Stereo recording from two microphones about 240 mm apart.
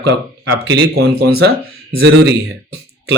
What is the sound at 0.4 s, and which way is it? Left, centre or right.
Speech, right.